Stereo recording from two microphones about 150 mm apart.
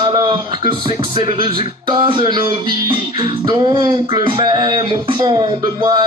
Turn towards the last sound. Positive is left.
turn(degrees=-25)  # may be behind; listen again after turning